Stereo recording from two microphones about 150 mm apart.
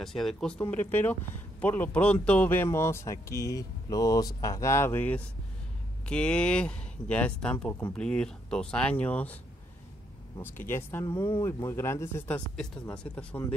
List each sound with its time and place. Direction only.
0.0 s speech: centre (ahead or behind)